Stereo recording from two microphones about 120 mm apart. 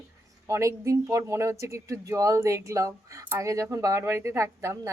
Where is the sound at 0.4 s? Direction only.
25° right (ahead or behind).